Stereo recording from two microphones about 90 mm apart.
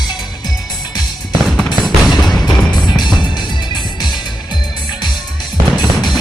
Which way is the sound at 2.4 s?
55° left (ahead or behind).